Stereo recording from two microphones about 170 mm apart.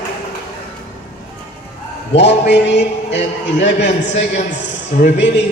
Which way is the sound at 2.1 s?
90° left.